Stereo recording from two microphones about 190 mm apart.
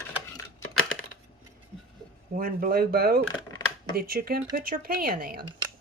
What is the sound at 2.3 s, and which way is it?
Speech, 50° right (ahead or behind).